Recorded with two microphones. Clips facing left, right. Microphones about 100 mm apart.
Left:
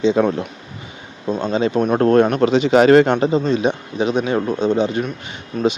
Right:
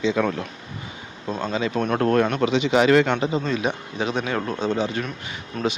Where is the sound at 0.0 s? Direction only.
30° left (ahead or behind).